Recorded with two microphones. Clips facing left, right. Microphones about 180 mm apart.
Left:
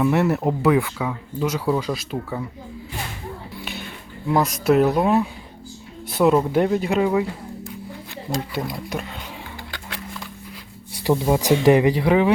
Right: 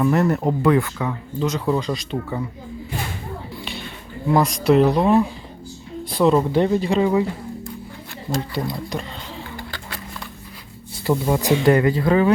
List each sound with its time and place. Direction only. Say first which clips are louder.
0.0 s speech: right 1 dB; 5° left (ahead or behind)
4.3 s speech: right 2 dB; centre (ahead or behind)
8.7 s speech: right 1 dB; 5° left (ahead or behind)
11.0 s speech: left 1 dB; 15° left (ahead or behind)